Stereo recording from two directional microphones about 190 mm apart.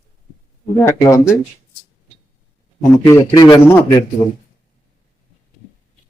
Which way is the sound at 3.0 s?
15° left (ahead or behind).